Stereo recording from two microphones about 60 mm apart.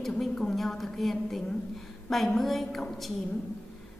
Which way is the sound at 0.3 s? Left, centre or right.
Centre.